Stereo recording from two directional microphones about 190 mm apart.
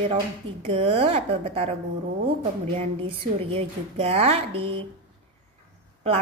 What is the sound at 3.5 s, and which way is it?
A woman's voice, 35° right (ahead or behind).